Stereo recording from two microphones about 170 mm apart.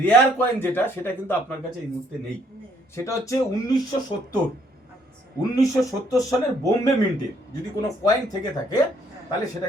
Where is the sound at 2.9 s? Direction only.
15° left (ahead or behind).